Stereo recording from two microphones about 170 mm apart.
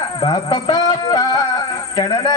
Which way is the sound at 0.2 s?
25° left (ahead or behind).